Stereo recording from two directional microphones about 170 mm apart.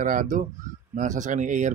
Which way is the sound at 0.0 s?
50° right (ahead or behind).